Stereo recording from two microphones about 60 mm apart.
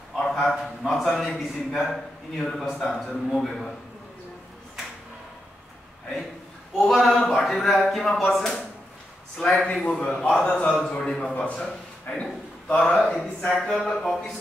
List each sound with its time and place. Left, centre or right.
0.3 s a man's voice: centre
6.8 s speech: centre
9.7 s speech: centre